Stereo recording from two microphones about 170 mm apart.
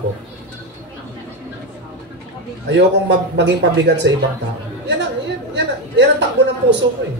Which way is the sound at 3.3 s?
90° right.